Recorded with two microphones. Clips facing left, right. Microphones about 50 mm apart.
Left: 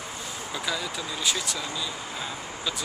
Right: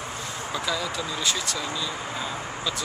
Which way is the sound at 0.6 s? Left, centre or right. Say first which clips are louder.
Right 2 dB; centre.